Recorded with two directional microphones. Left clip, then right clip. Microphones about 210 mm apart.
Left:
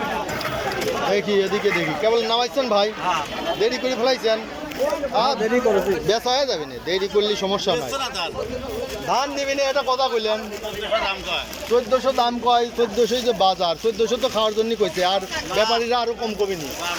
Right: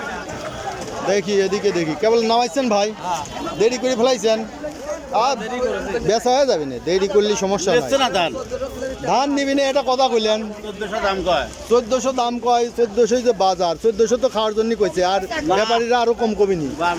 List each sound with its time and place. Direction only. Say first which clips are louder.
1.1 s speech: right 4 dB; 10° right (ahead or behind)
7.8 s speech: right 8 dB; 55° right (ahead or behind)
9.0 s speech: right 4 dB; 20° right (ahead or behind)
10.9 s speech: right 5 dB; 60° right (ahead or behind)
11.7 s speech: right 1 dB; 10° right (ahead or behind)